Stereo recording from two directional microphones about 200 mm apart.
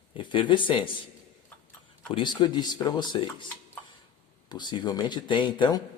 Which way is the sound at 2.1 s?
25° left (ahead or behind).